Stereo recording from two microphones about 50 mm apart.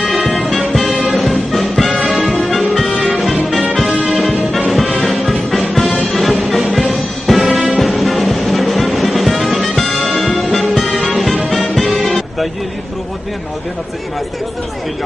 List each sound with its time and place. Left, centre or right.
0.1 s music: centre